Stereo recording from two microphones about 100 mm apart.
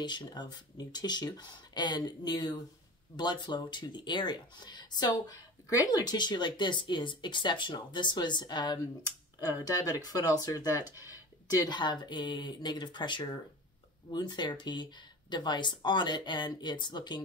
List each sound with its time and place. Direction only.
0.0 s speech: 50° left (ahead or behind)
10.9 s speech: 20° right (ahead or behind)
11.5 s speech: 45° left (ahead or behind)